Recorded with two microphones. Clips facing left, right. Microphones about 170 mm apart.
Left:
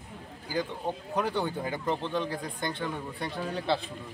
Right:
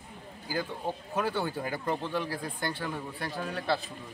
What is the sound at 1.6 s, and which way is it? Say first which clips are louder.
Speech: left 1 dB; 20° left (ahead or behind).